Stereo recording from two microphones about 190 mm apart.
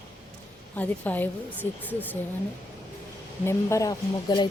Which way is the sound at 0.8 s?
10° left (ahead or behind).